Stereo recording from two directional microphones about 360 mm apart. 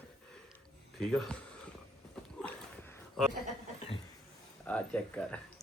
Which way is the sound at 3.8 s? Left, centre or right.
Centre.